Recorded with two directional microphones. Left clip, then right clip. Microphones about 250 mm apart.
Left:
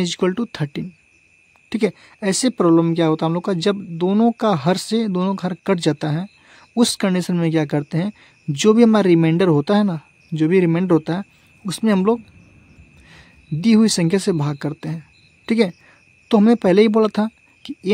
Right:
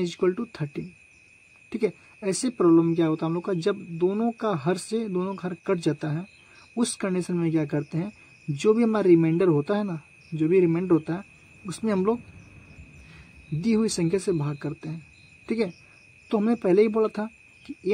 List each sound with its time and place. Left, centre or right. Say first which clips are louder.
0.0 s speech: left 5 dB; left